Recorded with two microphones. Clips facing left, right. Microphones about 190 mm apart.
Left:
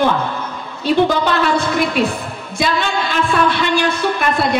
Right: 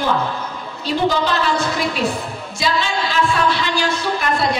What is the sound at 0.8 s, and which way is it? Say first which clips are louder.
A woman's voice: left 4 dB; 60° left (ahead or behind).